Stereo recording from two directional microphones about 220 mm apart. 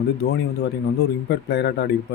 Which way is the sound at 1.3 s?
50° left (ahead or behind).